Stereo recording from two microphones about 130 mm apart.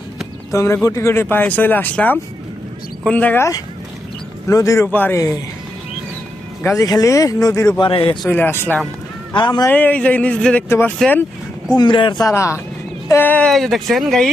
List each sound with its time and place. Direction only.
0.5 s speech: 25° left (ahead or behind)
6.6 s speech: 20° left (ahead or behind)
7.8 s a man's voice: 40° left (ahead or behind)
8.3 s speech: 15° left (ahead or behind)
9.3 s speech: 35° left (ahead or behind)
9.6 s speech: 15° left (ahead or behind)
11.8 s speech: 40° left (ahead or behind)
12.2 s speech: 25° left (ahead or behind)
13.5 s speech: centre (ahead or behind)